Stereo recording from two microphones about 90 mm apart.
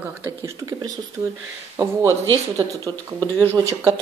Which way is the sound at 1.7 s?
35° right (ahead or behind).